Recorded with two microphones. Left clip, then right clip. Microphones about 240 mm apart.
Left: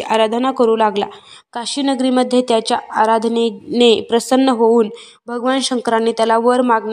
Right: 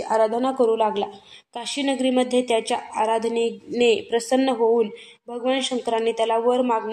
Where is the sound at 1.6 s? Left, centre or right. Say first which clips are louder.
Left 6 dB; left.